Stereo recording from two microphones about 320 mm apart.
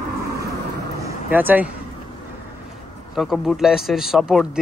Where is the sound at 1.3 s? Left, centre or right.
Centre.